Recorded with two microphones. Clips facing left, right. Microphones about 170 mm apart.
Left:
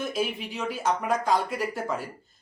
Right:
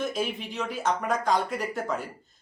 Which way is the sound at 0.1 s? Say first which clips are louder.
Left 1 dB; 5° left (ahead or behind).